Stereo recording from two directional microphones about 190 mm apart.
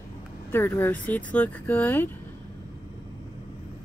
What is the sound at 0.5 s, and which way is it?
Speech, 10° left (ahead or behind).